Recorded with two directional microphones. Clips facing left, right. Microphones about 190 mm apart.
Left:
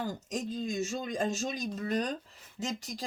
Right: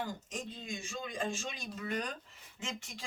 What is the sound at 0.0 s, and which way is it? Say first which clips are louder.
Speech: left 5 dB; 40° left (ahead or behind).